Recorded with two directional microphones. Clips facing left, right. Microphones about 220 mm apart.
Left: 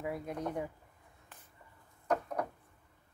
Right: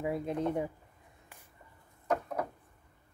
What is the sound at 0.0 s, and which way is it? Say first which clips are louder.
Speech: right 5 dB; 25° right (ahead or behind).